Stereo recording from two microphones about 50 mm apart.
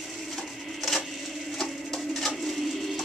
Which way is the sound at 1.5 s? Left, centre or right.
Centre.